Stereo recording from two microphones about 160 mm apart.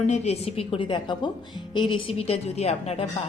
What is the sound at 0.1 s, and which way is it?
Speech, 40° left (ahead or behind).